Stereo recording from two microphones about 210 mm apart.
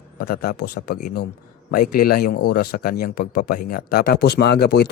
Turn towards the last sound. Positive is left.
turn(degrees=50)  # may be behind; listen again after turning